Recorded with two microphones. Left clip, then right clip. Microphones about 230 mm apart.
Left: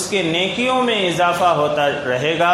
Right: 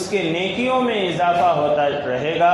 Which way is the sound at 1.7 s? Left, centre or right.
Left.